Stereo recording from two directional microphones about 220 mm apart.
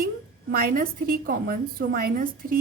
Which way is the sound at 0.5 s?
40° right (ahead or behind).